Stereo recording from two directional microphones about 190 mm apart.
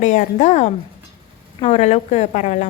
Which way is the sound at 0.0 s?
40° left (ahead or behind).